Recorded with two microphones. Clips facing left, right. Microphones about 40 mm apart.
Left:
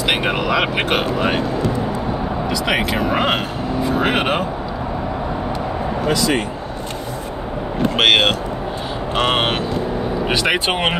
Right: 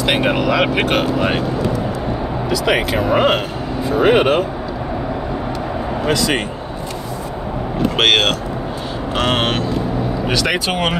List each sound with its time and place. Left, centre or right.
0.0 s speech: centre
2.5 s speech: centre
7.9 s speech: centre; by 11.0 s left